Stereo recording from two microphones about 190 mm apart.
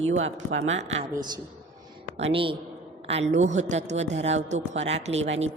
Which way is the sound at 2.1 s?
30° right (ahead or behind).